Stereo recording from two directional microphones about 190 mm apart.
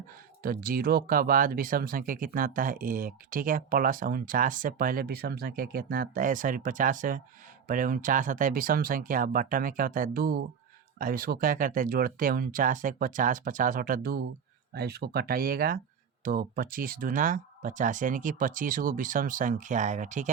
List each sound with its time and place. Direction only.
0.4 s speech: 50° right (ahead or behind)